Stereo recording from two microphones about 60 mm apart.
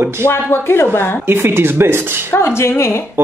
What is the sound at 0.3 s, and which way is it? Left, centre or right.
Speech, left.